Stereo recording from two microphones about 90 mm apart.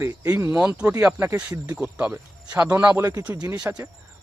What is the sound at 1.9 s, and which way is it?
A man's voice, 15° right (ahead or behind).